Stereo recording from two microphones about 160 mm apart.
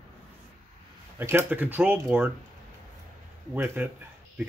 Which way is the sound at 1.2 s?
15° right (ahead or behind).